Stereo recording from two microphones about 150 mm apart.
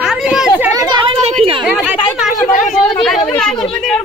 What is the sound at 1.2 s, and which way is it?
Speech, 40° right (ahead or behind).